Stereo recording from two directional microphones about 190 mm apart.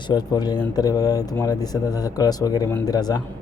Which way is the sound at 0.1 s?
20° left (ahead or behind).